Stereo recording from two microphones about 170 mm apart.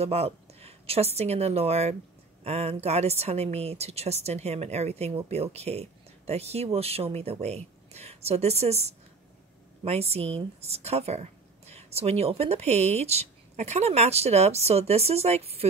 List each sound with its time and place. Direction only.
0.0 s a woman's voice: 35° right (ahead or behind)